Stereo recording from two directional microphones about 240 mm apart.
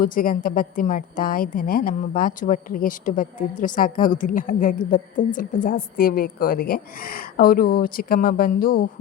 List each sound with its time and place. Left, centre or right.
0.0 s a woman's voice: left